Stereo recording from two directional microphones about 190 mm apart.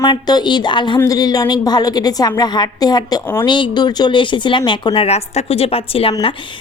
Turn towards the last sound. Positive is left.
turn(degrees=30)  # may be behind; listen again after turning